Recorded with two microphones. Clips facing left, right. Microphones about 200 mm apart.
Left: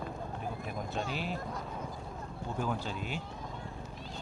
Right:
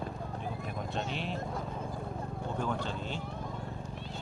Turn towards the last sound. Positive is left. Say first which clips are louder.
# right 1 dB
turn(degrees=10)  # may be behind; listen again after turning